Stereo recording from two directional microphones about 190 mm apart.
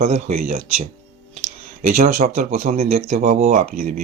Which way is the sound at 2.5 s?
35° right (ahead or behind).